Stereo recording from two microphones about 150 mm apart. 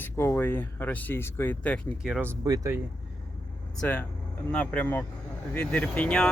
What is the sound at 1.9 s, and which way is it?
Speech, 5° right (ahead or behind).